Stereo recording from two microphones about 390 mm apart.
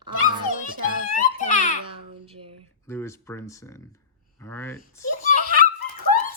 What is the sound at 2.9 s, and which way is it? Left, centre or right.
Speech, centre.